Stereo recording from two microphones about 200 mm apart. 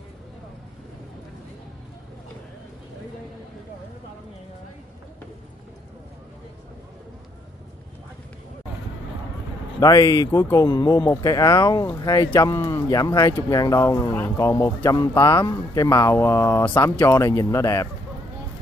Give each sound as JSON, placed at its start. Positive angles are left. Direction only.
{"t": 9.8, "sound": "speech", "side_deg": 20}